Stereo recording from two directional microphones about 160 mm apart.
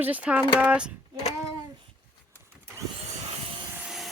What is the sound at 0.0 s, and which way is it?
Speech, 10° right (ahead or behind).